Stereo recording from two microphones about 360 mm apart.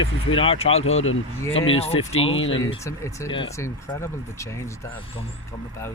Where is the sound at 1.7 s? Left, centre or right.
Centre.